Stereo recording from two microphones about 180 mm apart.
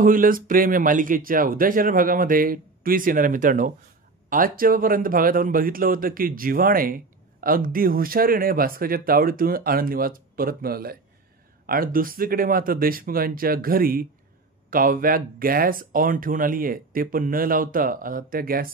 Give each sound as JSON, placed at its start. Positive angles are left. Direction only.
{"t": 0.0, "sound": "speech", "side_deg": -50}